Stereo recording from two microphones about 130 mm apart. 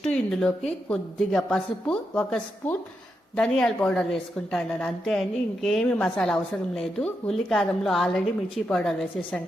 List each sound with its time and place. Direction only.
0.0 s a woman's voice: 5° left (ahead or behind)